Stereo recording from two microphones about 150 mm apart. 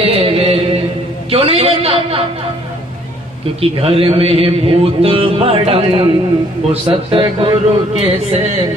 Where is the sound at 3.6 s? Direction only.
40° right (ahead or behind).